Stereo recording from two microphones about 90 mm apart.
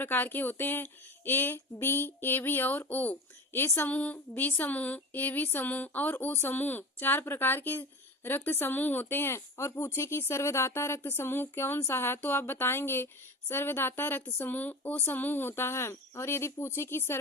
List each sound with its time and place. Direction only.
0.0 s speech: 20° left (ahead or behind)